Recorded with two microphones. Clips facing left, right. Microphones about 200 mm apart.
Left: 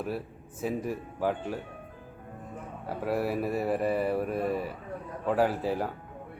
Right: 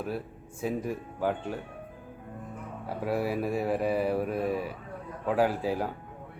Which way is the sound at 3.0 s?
Centre (ahead or behind).